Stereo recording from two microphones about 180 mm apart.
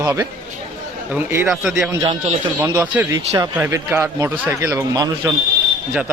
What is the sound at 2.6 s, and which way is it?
Speech, 10° right (ahead or behind).